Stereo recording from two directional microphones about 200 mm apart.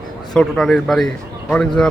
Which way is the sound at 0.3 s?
Centre (ahead or behind).